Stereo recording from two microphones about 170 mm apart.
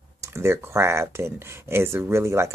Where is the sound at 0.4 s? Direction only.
15° right (ahead or behind).